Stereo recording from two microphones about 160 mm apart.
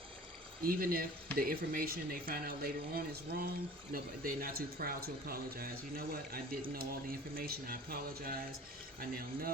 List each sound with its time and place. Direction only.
0.6 s speech: 65° right (ahead or behind)